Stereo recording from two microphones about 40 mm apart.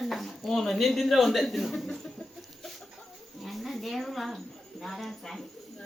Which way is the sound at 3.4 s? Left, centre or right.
Centre.